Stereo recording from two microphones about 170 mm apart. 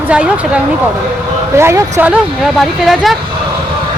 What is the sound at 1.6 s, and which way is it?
Speech, 15° right (ahead or behind).